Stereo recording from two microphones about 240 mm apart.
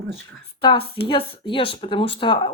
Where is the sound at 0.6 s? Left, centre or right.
Left.